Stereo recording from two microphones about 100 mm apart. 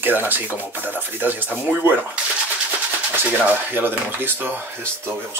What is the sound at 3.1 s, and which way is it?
Speech, 20° right (ahead or behind).